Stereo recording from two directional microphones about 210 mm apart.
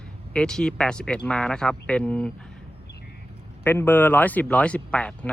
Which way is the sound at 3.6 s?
10° left (ahead or behind).